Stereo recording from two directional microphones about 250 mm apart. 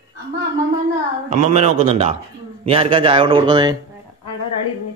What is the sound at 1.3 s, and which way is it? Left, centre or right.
Speech, right.